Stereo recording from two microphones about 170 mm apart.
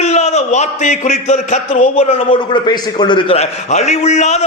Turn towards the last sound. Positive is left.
turn(degrees=40)  # may be behind; listen again after turning